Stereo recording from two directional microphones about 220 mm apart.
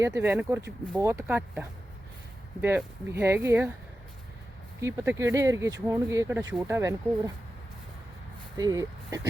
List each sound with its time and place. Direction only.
0.0 s speech: 10° right (ahead or behind)
4.8 s speech: 10° right (ahead or behind)
8.5 s speech: 15° right (ahead or behind)